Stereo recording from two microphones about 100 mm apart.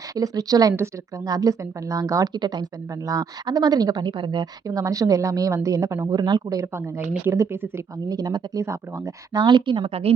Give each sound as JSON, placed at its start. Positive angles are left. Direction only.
{"t": 0.1, "sound": "speech", "side_deg": -40}
{"t": 4.7, "sound": "speech", "side_deg": -35}
{"t": 8.1, "sound": "speech", "side_deg": -40}
{"t": 8.6, "sound": "speech", "side_deg": -30}
{"t": 9.3, "sound": "speech", "side_deg": -50}